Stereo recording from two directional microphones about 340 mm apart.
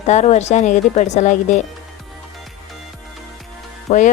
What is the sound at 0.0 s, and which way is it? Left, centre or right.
Speech, centre.